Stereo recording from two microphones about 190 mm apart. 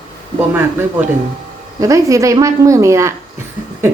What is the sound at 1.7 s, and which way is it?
A woman's voice, 15° right (ahead or behind).